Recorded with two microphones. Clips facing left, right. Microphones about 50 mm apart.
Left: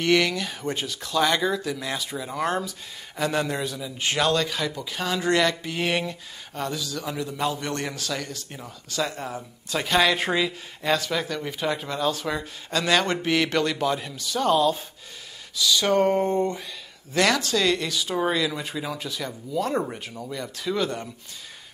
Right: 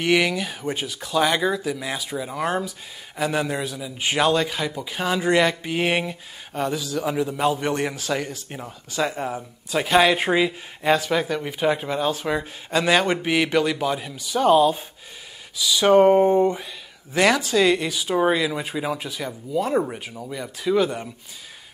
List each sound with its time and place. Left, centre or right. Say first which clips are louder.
0.0 s a man's voice: right 1 dB; centre